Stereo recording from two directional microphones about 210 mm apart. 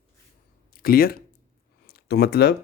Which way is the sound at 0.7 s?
45° left (ahead or behind).